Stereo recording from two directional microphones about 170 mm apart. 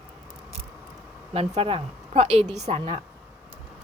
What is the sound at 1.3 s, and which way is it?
Speech, 35° right (ahead or behind).